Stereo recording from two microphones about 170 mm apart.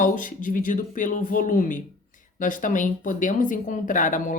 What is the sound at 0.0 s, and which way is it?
Speech, 50° left (ahead or behind).